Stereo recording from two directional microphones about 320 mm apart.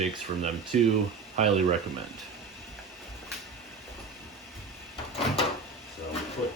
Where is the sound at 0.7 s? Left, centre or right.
Right.